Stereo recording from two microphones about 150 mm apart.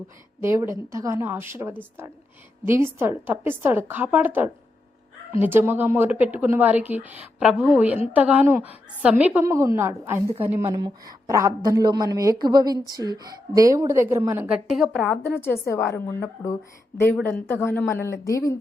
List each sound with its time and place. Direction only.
0.4 s a woman's voice: 15° right (ahead or behind); by 15.2 s centre (ahead or behind)
15.2 s a woman's voice: 15° left (ahead or behind)